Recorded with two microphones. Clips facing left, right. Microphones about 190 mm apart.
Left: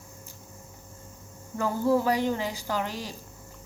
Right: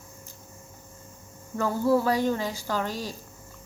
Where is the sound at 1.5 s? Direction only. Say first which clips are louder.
Right 1 dB; 15° left (ahead or behind).